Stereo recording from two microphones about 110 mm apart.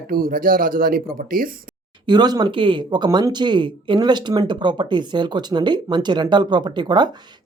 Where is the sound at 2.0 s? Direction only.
40° right (ahead or behind).